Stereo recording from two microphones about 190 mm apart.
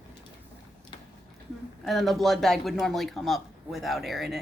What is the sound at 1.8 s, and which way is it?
A man's voice, centre (ahead or behind).